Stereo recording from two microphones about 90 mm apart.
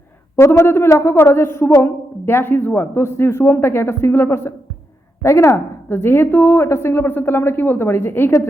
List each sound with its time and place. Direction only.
0.3 s a woman's voice: 30° left (ahead or behind)